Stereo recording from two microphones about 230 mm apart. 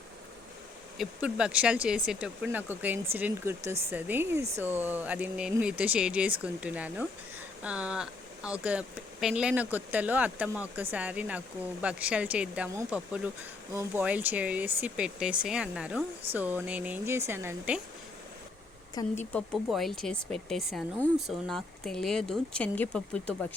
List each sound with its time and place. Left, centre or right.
0.9 s speech: centre
19.0 s speech: centre
19.3 s speech: centre